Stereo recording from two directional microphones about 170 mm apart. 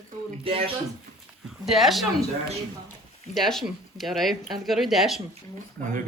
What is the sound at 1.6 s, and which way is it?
Speech, centre (ahead or behind).